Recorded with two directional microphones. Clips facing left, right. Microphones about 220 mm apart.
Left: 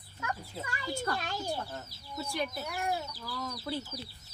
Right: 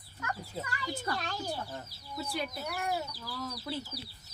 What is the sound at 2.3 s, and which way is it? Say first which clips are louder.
Speech: left 2 dB; 5° right (ahead or behind).